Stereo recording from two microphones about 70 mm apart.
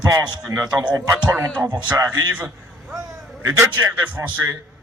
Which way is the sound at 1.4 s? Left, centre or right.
Right.